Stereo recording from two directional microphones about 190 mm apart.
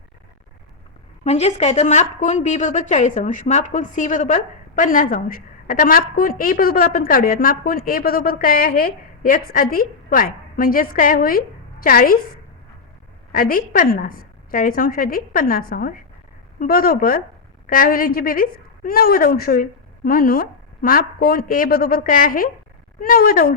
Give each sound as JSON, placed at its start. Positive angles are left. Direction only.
{"t": 1.2, "sound": "a woman's voice", "side_deg": 35}
{"t": 13.3, "sound": "a woman's voice", "side_deg": 50}